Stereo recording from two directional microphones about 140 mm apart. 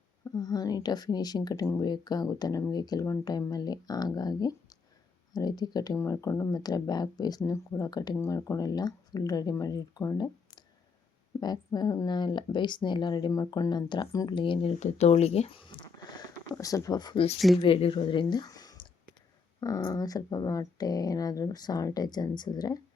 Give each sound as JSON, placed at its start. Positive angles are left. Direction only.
{"t": 0.3, "sound": "speech", "side_deg": 25}
{"t": 16.0, "sound": "a sound", "side_deg": 30}
{"t": 17.3, "sound": "speech", "side_deg": 0}
{"t": 17.6, "sound": "speech", "side_deg": 40}